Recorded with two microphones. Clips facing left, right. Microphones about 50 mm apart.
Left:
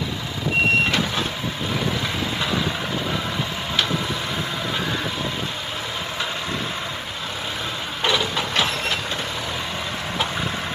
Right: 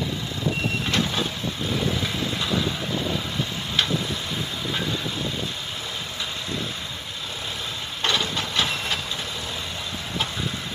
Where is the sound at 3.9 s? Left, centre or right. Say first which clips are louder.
Left 3 dB; left.